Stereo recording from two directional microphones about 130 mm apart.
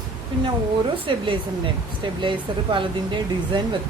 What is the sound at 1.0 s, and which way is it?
Speech, 40° right (ahead or behind).